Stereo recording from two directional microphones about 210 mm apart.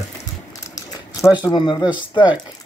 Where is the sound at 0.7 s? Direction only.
15° left (ahead or behind).